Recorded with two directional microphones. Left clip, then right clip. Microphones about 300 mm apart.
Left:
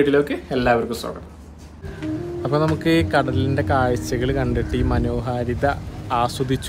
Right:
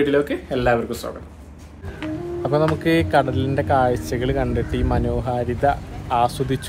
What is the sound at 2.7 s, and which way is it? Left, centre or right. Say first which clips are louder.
Speech: right 1 dB; centre.